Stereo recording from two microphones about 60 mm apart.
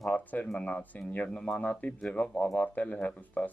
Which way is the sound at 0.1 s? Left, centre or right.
Left.